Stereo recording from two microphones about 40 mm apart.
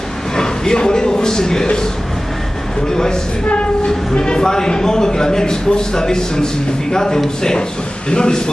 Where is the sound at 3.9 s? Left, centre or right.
Centre.